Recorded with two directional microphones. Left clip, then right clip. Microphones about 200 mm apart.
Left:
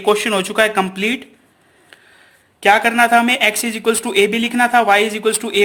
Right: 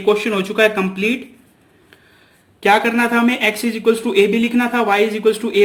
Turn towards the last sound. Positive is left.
turn(degrees=40)  # may be behind; listen again after turning